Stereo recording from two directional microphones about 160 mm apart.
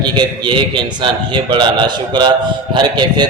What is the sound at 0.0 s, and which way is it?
A man's voice, 30° right (ahead or behind).